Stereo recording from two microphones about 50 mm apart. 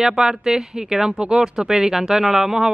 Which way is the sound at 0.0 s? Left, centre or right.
Centre.